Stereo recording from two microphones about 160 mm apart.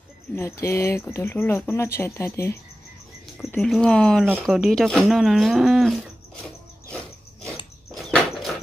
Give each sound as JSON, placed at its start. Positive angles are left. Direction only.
{"t": 0.4, "sound": "speech", "side_deg": 15}
{"t": 3.3, "sound": "speech", "side_deg": 5}
{"t": 7.9, "sound": "a sound", "side_deg": 0}